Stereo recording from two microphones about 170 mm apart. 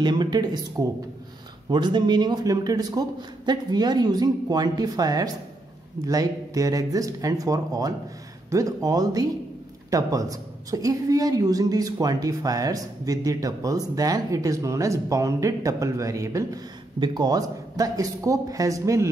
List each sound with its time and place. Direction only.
0.0 s a woman's voice: 25° right (ahead or behind)